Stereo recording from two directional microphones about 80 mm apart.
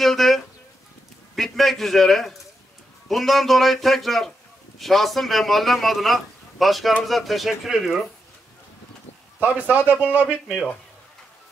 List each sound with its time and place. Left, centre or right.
0.0 s a sound: centre
1.3 s a man's voice: centre
9.4 s speech: centre